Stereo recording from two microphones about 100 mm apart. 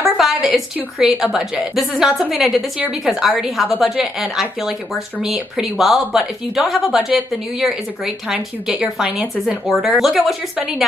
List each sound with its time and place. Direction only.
0.2 s a woman's voice: centre (ahead or behind)